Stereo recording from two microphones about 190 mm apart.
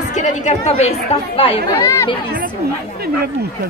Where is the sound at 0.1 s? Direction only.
40° left (ahead or behind).